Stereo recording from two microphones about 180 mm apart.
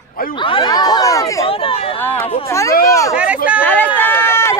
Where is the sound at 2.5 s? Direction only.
15° left (ahead or behind).